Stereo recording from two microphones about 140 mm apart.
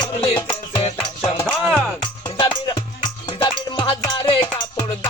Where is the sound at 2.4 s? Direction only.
35° left (ahead or behind).